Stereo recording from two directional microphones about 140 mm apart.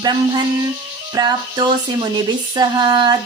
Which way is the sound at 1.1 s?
30° right (ahead or behind).